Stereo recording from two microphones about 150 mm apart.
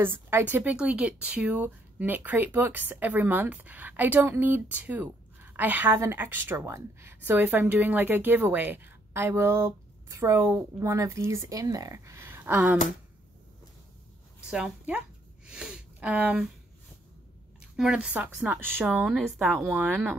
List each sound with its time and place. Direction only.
0.0 s a woman's voice: 15° right (ahead or behind)
14.5 s a sound: 5° right (ahead or behind)
17.6 s a woman's voice: 5° right (ahead or behind)
18.9 s a woman's voice: centre (ahead or behind)
19.6 s a woman's voice: 10° right (ahead or behind)